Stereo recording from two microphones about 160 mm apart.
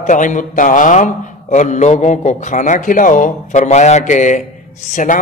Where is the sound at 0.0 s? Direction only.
50° left (ahead or behind).